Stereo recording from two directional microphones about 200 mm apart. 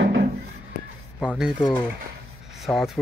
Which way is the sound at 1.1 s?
Centre (ahead or behind).